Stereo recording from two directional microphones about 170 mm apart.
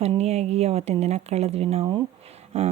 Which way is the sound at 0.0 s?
40° right (ahead or behind).